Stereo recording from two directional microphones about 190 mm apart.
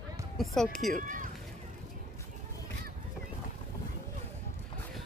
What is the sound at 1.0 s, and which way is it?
Speech, 45° right (ahead or behind).